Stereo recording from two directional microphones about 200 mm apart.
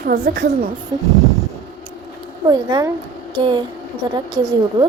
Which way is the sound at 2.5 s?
20° right (ahead or behind).